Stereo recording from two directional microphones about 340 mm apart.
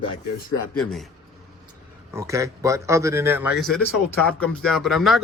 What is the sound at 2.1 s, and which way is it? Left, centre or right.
A man's voice, centre.